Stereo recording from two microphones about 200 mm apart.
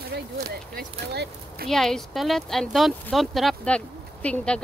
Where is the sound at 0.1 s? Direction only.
50° right (ahead or behind).